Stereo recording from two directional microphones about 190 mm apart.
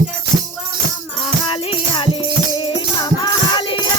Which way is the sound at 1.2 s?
25° left (ahead or behind).